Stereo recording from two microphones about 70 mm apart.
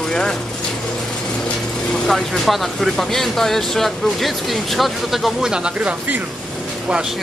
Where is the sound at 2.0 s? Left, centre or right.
Centre.